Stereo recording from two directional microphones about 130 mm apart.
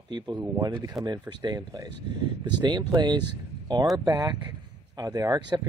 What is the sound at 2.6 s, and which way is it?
Speech, 35° right (ahead or behind).